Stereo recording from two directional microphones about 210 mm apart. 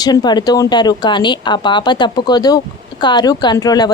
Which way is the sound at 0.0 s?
20° left (ahead or behind).